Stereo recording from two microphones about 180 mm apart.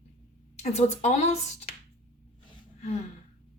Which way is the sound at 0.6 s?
40° left (ahead or behind).